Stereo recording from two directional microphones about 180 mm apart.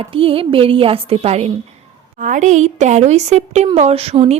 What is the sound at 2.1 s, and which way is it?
Speech, 45° right (ahead or behind).